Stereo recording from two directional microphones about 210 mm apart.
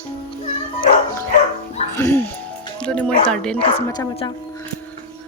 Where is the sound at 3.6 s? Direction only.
20° left (ahead or behind).